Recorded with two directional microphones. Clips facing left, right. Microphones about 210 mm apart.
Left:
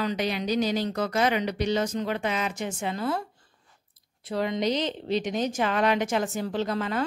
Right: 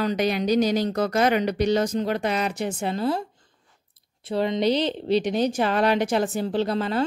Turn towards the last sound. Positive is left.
turn(degrees=-30)  # may be behind; listen again after turning